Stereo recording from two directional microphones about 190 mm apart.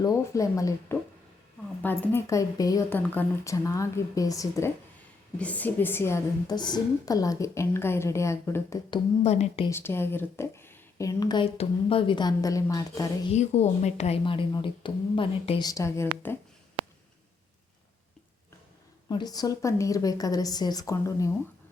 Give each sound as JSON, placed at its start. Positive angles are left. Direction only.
{"t": 0.0, "sound": "a woman's voice", "side_deg": 15}
{"t": 9.2, "sound": "a woman's voice", "side_deg": 35}
{"t": 9.6, "sound": "speech", "side_deg": 10}
{"t": 11.5, "sound": "a woman's voice", "side_deg": 30}
{"t": 13.3, "sound": "a woman's voice", "side_deg": 35}
{"t": 19.0, "sound": "a woman's voice", "side_deg": 20}